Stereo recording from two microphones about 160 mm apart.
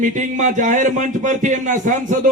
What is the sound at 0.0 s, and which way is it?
A man's voice, 50° right (ahead or behind).